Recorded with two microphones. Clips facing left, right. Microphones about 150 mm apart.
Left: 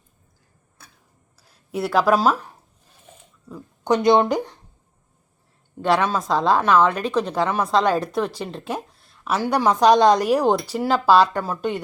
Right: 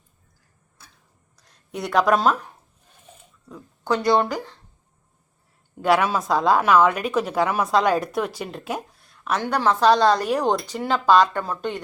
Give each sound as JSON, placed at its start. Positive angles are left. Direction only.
{"t": 1.4, "sound": "speech", "side_deg": 5}
{"t": 3.8, "sound": "speech", "side_deg": 20}
{"t": 5.8, "sound": "a woman's voice", "side_deg": -5}